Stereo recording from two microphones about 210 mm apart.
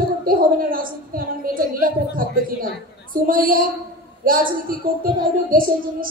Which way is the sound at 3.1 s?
40° right (ahead or behind).